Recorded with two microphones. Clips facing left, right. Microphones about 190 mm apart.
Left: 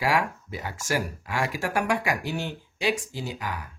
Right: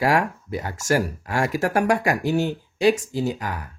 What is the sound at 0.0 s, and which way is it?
Speech, 45° right (ahead or behind).